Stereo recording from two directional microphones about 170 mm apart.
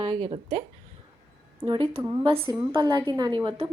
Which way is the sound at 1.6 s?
30° right (ahead or behind).